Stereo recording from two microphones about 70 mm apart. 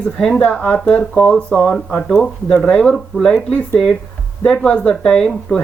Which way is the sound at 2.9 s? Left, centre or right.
Centre.